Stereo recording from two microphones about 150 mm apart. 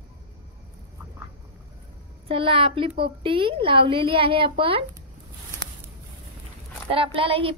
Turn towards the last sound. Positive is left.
turn(degrees=-40)  # may be behind; listen again after turning